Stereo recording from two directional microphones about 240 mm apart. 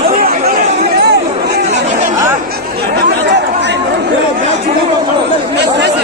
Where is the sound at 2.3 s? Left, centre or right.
Right.